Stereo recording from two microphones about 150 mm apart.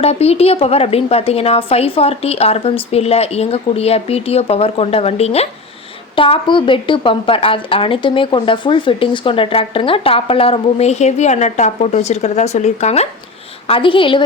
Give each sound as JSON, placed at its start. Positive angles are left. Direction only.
{"t": 0.0, "sound": "a woman's voice", "side_deg": 45}
{"t": 13.7, "sound": "a woman's voice", "side_deg": 35}